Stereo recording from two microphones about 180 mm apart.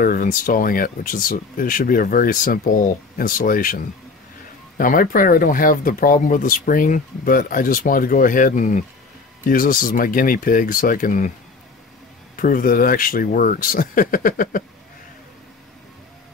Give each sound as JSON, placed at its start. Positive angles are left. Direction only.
{"t": 0.0, "sound": "speech", "side_deg": 50}
{"t": 12.4, "sound": "speech", "side_deg": 50}